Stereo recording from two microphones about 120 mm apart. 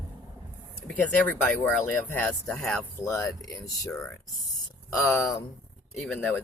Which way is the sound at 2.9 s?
25° left (ahead or behind).